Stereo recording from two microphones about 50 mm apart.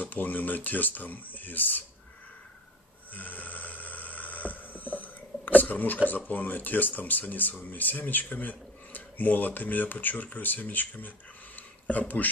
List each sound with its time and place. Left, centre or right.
0.0 s speech: left
3.1 s snoring: left
6.0 s speech: left